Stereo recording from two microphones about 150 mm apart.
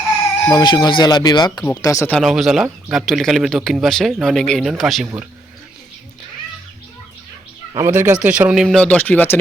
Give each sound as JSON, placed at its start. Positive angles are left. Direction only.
{"t": 0.4, "sound": "speech", "side_deg": 25}
{"t": 2.1, "sound": "speech", "side_deg": 0}
{"t": 7.7, "sound": "speech", "side_deg": -25}
{"t": 7.9, "sound": "speech", "side_deg": -10}